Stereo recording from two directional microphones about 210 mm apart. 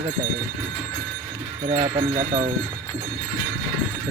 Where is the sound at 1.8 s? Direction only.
25° right (ahead or behind).